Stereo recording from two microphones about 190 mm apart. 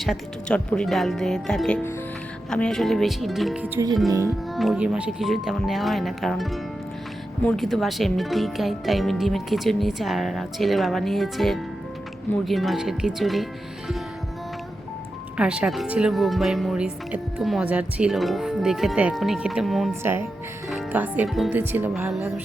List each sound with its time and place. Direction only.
0.0 s speech: centre (ahead or behind)
4.1 s speech: 20° right (ahead or behind)
4.5 s speech: centre (ahead or behind)
15.4 s speech: 5° right (ahead or behind)
20.0 s speech: 10° right (ahead or behind)